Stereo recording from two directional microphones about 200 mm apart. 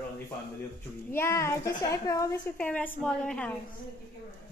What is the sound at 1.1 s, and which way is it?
A woman's voice, 15° left (ahead or behind).